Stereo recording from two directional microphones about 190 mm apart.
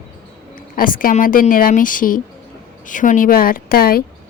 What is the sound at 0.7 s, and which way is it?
A woman's voice, 45° left (ahead or behind).